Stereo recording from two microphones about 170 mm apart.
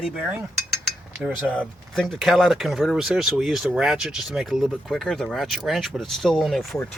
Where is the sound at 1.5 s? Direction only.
5° left (ahead or behind).